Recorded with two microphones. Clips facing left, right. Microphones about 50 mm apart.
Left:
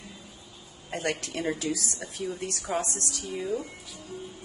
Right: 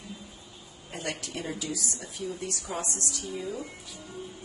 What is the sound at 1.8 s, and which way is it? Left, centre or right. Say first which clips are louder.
Speech: left 2 dB; left.